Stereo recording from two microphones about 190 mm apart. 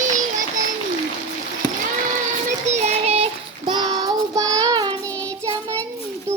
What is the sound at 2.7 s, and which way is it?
Child singing, 35° right (ahead or behind).